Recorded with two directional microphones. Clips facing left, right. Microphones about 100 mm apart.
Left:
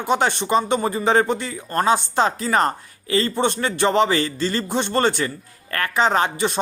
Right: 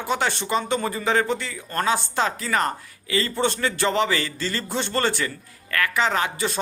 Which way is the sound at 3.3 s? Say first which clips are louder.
Left 2 dB; 20° left (ahead or behind).